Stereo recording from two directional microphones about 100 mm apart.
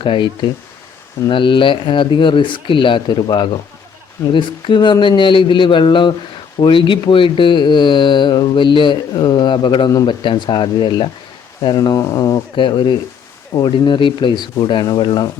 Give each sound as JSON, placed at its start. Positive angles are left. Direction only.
{"t": 0.0, "sound": "speech", "side_deg": 55}
{"t": 1.3, "sound": "speech", "side_deg": 55}
{"t": 12.5, "sound": "speech", "side_deg": 50}